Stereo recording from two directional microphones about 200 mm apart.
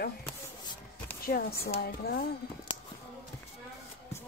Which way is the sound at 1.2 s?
50° left (ahead or behind).